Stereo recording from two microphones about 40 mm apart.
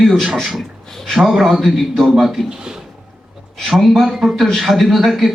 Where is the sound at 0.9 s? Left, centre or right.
Centre.